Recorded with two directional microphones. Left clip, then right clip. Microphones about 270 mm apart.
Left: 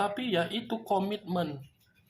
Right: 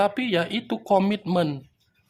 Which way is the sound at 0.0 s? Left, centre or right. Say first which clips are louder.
Right 7 dB; right.